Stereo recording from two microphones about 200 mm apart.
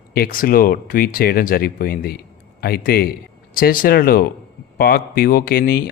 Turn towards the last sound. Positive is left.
turn(degrees=50)  # may be behind; listen again after turning